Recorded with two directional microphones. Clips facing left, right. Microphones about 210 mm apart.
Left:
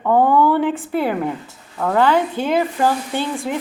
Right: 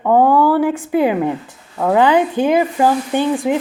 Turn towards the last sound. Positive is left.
turn(degrees=-15)  # may be behind; listen again after turning